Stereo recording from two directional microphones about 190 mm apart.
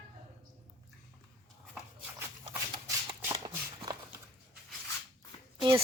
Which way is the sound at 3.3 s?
25° right (ahead or behind).